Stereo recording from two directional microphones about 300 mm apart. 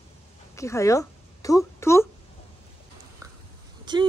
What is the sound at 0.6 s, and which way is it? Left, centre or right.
Speech, centre.